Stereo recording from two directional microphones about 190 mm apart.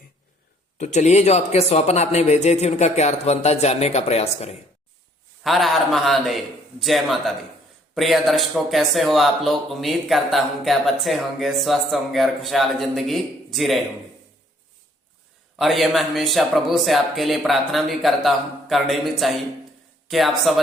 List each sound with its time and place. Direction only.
0.8 s speech: 40° left (ahead or behind)
5.4 s a man's voice: centre (ahead or behind)
15.5 s a man's voice: centre (ahead or behind)